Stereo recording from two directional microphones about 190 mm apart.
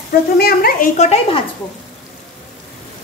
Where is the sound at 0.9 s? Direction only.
35° left (ahead or behind).